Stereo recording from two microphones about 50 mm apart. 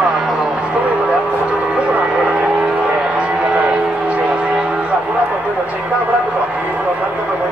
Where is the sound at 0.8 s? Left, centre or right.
Right.